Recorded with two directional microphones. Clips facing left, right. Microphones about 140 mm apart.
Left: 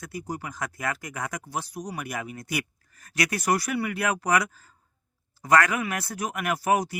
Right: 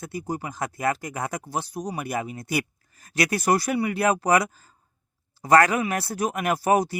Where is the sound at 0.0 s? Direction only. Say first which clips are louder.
Right 4 dB; 30° right (ahead or behind).